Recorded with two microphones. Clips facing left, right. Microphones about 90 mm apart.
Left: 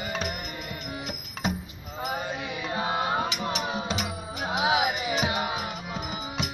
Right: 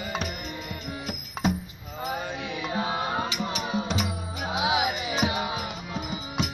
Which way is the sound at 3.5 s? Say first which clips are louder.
Even; 25° left (ahead or behind).